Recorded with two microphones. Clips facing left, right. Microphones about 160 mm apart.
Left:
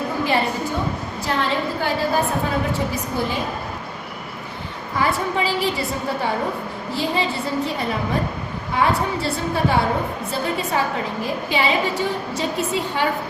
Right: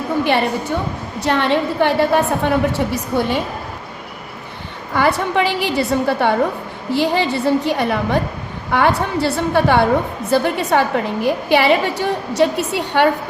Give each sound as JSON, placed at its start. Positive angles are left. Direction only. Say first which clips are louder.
{"t": 1.2, "sound": "a woman's voice", "louder": "right 6 dB", "side_deg": -70}
{"t": 4.9, "sound": "a woman's voice", "louder": "right 5 dB", "side_deg": -75}